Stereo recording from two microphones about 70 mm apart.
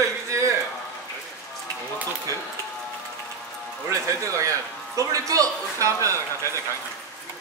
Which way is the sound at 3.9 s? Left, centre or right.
Right.